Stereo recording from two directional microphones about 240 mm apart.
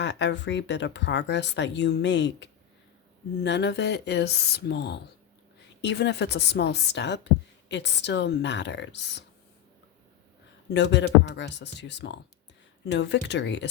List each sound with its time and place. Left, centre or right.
0.0 s speech: left
10.8 s speech: left